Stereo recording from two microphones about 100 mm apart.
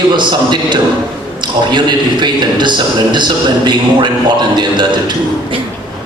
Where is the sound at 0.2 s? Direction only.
50° right (ahead or behind).